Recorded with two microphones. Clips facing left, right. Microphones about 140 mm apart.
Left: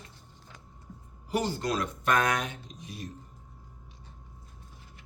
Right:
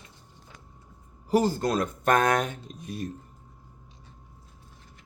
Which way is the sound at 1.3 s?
40° right (ahead or behind).